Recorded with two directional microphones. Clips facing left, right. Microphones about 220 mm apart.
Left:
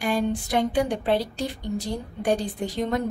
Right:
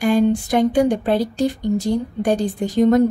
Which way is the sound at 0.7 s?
45° right (ahead or behind).